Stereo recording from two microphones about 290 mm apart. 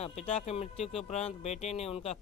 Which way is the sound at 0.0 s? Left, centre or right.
Left.